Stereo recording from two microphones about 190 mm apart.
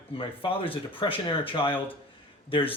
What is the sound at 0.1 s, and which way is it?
A man's voice, 30° left (ahead or behind).